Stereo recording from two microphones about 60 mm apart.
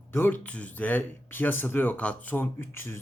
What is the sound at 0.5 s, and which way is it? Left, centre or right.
Speech, left.